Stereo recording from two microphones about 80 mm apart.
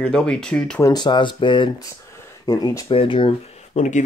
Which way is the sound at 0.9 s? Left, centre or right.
Left.